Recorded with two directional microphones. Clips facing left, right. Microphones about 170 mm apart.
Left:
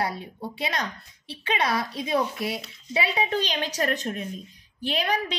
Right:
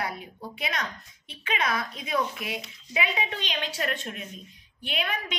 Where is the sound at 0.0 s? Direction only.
30° left (ahead or behind).